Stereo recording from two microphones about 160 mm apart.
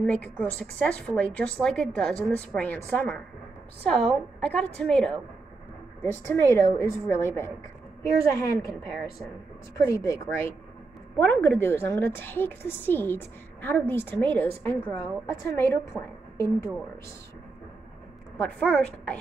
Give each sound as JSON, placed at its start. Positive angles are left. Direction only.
{"t": 0.0, "sound": "a woman's voice", "side_deg": 5}
{"t": 6.2, "sound": "a woman's voice", "side_deg": 15}
{"t": 9.8, "sound": "a woman's voice", "side_deg": 20}
{"t": 18.4, "sound": "a woman's voice", "side_deg": 10}